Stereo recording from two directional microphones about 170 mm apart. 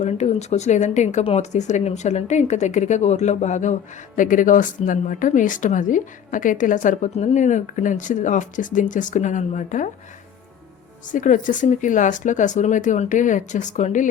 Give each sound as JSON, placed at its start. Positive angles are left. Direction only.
{"t": 0.0, "sound": "speech", "side_deg": 40}
{"t": 11.1, "sound": "speech", "side_deg": 50}